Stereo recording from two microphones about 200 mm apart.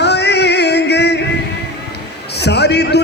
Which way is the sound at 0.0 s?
55° left (ahead or behind).